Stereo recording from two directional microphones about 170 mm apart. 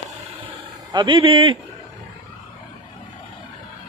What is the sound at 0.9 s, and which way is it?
Speech, 30° right (ahead or behind).